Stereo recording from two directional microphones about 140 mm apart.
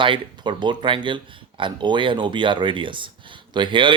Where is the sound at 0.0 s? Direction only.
35° right (ahead or behind).